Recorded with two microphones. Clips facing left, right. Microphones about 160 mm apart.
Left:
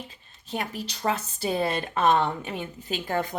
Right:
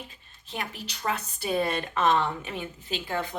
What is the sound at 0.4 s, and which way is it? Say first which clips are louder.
A woman's voice: left 4 dB; 40° left (ahead or behind).